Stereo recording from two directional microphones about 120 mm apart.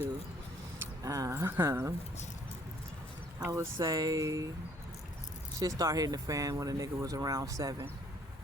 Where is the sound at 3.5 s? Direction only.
30° right (ahead or behind).